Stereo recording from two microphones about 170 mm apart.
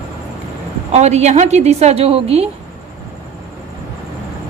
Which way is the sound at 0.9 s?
40° right (ahead or behind).